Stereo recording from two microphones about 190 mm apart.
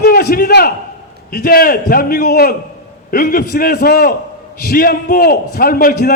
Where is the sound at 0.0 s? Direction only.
55° left (ahead or behind).